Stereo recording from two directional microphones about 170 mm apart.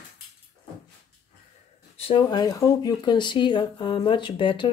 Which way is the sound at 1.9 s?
30° left (ahead or behind).